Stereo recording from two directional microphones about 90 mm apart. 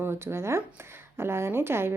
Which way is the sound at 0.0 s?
30° right (ahead or behind).